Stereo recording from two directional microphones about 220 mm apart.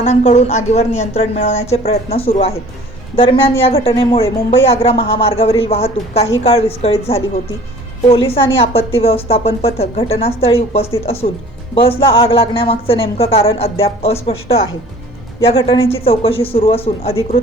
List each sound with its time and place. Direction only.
0.0 s speech: 30° left (ahead or behind)